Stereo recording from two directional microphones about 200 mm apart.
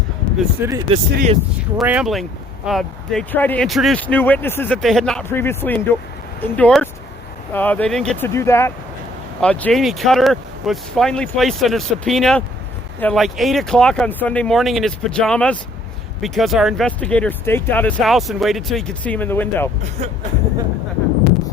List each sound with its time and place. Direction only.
0.3 s speech: 15° right (ahead or behind)
0.9 s speech: 30° right (ahead or behind)
1.8 s speech: 5° right (ahead or behind)
20.0 s speech: 35° right (ahead or behind)